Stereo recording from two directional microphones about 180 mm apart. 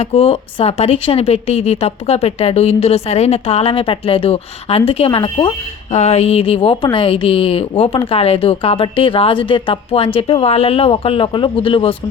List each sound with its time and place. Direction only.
0.0 s a woman's voice: 35° left (ahead or behind)
5.9 s a woman's voice: 40° left (ahead or behind)